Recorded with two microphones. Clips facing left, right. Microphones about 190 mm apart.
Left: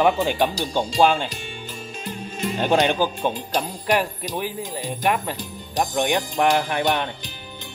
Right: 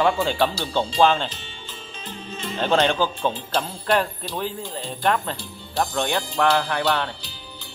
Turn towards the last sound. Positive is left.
turn(degrees=20)  # may be behind; listen again after turning